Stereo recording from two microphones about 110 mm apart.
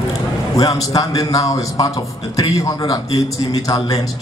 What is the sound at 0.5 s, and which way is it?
A man's voice, 35° left (ahead or behind).